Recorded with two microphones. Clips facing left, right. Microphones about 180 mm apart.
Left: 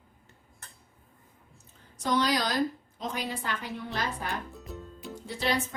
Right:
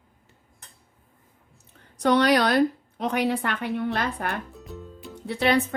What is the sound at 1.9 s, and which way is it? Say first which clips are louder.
A woman's voice: right 8 dB; 65° right (ahead or behind).